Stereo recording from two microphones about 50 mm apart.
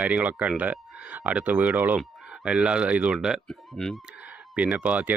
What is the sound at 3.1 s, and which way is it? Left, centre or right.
Speech, centre.